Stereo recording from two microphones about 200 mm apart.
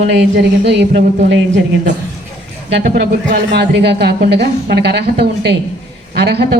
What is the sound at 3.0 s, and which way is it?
A woman's voice, 55° right (ahead or behind).